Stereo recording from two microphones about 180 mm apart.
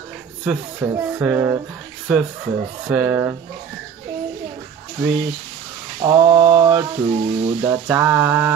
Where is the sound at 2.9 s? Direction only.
10° right (ahead or behind).